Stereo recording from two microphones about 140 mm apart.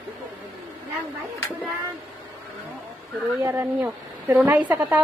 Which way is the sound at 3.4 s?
20° right (ahead or behind).